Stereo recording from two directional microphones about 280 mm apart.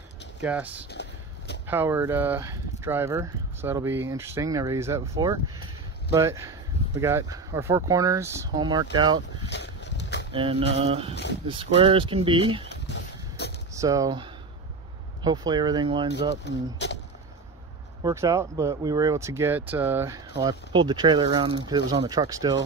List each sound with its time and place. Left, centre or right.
0.4 s speech: centre
9.5 s boat: left
10.3 s speech: centre
12.6 s a sound: left
13.7 s speech: centre
16.4 s speech: left
18.0 s speech: centre